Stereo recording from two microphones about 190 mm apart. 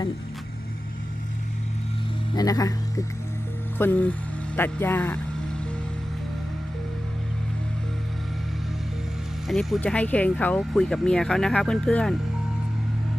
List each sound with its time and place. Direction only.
2.3 s speech: 20° left (ahead or behind)
9.5 s speech: centre (ahead or behind)